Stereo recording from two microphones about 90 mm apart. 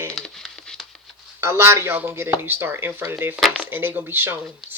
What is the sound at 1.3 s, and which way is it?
Speech, 25° right (ahead or behind).